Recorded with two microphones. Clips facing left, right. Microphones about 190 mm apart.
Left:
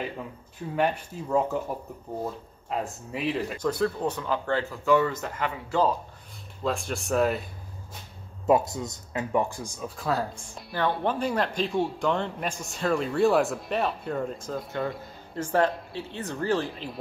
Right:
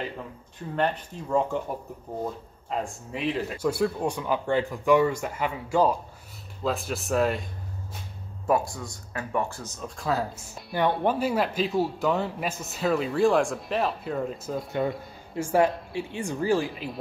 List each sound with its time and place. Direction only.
0.7 s speech: 10° left (ahead or behind)
2.7 s a man's voice: centre (ahead or behind)
8.5 s a man's voice: 20° left (ahead or behind); by 14.7 s 5° right (ahead or behind)
14.7 s speech: 20° right (ahead or behind)
15.3 s speech: 10° right (ahead or behind)